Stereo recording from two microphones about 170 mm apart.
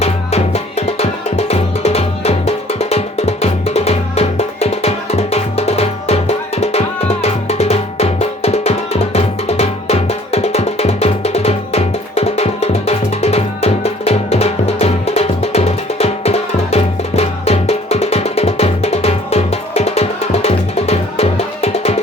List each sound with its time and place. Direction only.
0.0 s music: 40° left (ahead or behind)